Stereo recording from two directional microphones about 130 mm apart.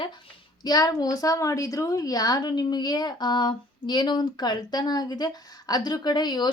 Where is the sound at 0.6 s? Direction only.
30° left (ahead or behind).